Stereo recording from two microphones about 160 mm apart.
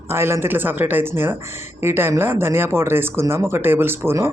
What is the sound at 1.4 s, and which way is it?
Speech, 45° left (ahead or behind).